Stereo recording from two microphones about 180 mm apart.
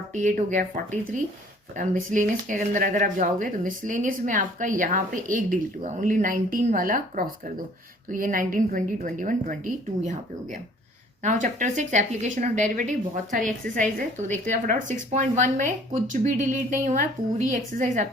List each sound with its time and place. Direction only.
0.1 s speech: 45° right (ahead or behind)
1.7 s speech: 45° right (ahead or behind)